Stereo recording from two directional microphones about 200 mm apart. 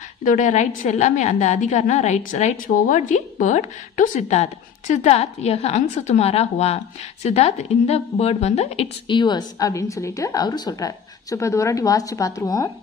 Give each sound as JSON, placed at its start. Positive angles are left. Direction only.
{"t": 0.2, "sound": "a woman's voice", "side_deg": 40}